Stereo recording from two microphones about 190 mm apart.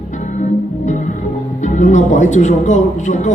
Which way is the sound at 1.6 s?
40° left (ahead or behind).